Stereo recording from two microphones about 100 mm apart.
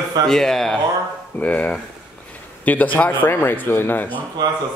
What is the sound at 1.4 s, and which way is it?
Speech, 15° left (ahead or behind).